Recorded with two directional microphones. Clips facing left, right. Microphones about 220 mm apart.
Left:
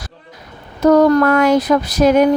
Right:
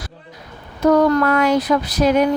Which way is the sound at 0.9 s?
45° left (ahead or behind).